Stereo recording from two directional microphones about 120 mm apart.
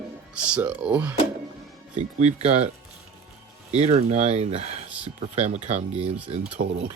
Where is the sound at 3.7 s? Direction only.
65° right (ahead or behind).